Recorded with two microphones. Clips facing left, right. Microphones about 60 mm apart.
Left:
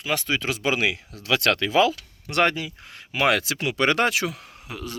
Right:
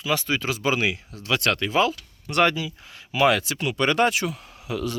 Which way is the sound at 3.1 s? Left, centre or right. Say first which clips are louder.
Right 2 dB; left.